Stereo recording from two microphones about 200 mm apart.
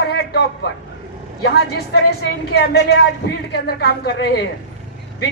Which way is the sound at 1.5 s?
55° left (ahead or behind).